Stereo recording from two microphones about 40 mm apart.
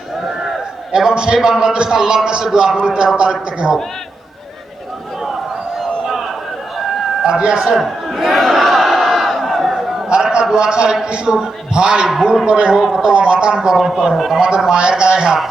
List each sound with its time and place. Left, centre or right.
1.1 s a man's voice: centre
5.8 s a sound: centre
7.7 s crowd: centre
10.5 s a man's voice: centre
14.4 s a man's voice: centre